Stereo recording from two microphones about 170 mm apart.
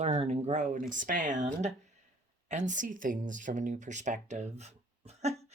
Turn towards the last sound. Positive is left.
turn(degrees=-40)  # may be behind; listen again after turning